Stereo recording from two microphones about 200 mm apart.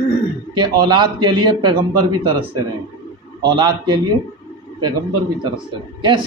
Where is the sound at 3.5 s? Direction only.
20° right (ahead or behind).